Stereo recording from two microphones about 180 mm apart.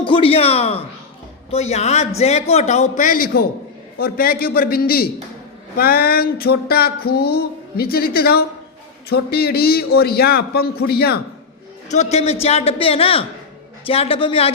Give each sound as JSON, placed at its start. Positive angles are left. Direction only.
{"t": 0.0, "sound": "a man's voice", "side_deg": 30}
{"t": 3.9, "sound": "a sound", "side_deg": 55}
{"t": 11.9, "sound": "a man's voice", "side_deg": 40}